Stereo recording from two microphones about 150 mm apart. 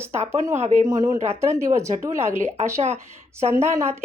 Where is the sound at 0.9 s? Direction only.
25° right (ahead or behind).